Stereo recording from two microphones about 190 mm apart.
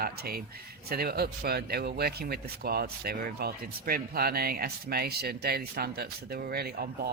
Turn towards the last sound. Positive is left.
turn(degrees=-55)  # may be behind; listen again after turning